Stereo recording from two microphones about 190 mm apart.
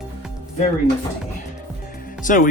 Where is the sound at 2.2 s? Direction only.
45° left (ahead or behind).